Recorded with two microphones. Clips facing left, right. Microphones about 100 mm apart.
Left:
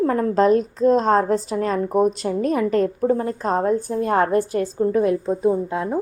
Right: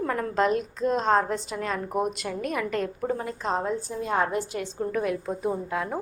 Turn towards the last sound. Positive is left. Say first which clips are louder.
# left 7 dB
turn(degrees=25)  # may be behind; listen again after turning